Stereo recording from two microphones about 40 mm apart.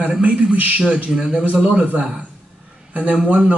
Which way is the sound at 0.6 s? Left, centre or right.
Right.